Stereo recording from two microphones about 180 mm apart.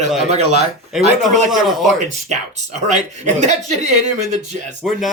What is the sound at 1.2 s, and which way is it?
Speech, centre (ahead or behind).